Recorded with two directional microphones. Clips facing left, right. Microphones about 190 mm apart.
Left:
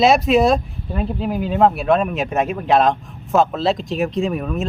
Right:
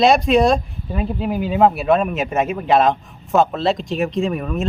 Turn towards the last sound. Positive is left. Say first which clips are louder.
# even
turn(degrees=0)  # may be behind; listen again after turning